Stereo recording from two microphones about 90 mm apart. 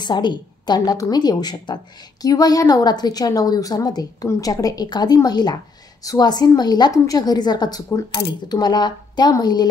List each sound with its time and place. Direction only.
0.0 s a woman's voice: 55° left (ahead or behind)